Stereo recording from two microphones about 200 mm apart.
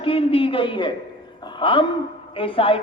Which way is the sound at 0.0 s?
30° left (ahead or behind).